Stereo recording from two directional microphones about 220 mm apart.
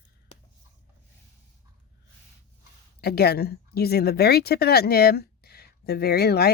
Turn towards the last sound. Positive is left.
turn(degrees=45)  # may be behind; listen again after turning